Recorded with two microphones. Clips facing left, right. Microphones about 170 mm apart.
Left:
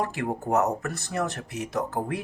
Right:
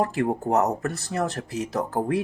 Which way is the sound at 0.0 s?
30° right (ahead or behind).